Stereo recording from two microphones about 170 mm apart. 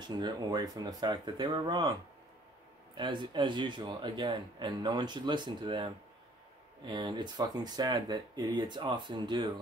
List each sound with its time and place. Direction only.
0.0 s a man's voice: 25° right (ahead or behind)